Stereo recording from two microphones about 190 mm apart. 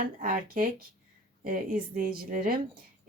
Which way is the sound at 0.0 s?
45° right (ahead or behind).